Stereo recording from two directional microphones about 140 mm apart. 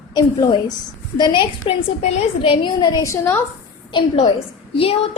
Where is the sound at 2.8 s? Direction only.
25° left (ahead or behind).